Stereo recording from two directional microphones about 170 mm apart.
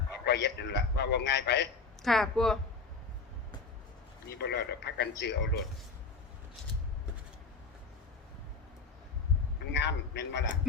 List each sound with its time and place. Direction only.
0.3 s a man's voice: 85° left
2.0 s speech: centre (ahead or behind)
4.3 s a man's voice: 80° left
9.7 s a man's voice: 90° left